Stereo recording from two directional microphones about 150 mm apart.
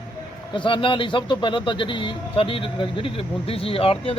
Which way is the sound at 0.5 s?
35° left (ahead or behind).